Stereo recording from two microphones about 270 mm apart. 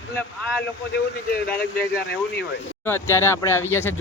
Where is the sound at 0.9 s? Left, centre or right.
Left.